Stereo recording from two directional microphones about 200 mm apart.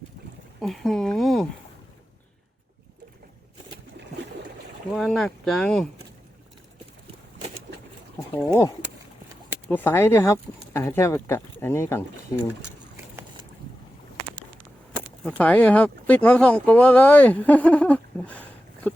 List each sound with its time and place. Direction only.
0.6 s speech: centre (ahead or behind)
4.9 s speech: centre (ahead or behind)
9.6 s speech: 10° left (ahead or behind)
15.2 s speech: 5° left (ahead or behind)